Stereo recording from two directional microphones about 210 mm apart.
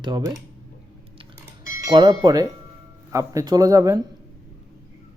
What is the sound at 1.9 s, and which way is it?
Speech, 20° right (ahead or behind).